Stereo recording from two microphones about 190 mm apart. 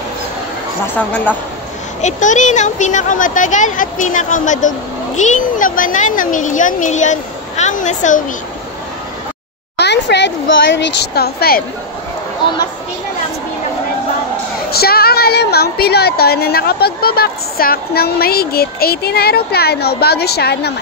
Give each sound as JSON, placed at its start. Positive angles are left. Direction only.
{"t": 0.9, "sound": "speech", "side_deg": 10}
{"t": 2.0, "sound": "speech", "side_deg": 40}
{"t": 9.8, "sound": "a sound", "side_deg": 65}
{"t": 11.0, "sound": "a woman's voice", "side_deg": 55}
{"t": 14.7, "sound": "a woman's voice", "side_deg": 55}